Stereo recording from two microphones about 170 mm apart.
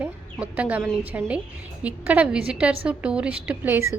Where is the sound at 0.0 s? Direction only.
10° right (ahead or behind).